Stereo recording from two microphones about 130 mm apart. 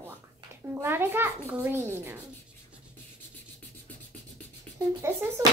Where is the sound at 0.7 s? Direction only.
20° right (ahead or behind).